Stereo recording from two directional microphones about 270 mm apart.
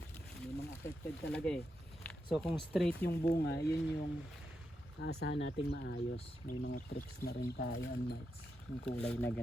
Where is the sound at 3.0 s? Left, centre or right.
Left.